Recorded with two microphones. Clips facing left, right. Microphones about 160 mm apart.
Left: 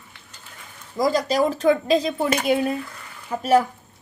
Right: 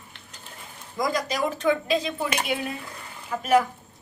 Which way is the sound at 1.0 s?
30° left (ahead or behind).